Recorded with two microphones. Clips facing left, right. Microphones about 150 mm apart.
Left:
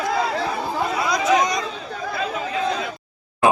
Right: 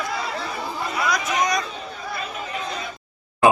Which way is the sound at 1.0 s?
25° left (ahead or behind).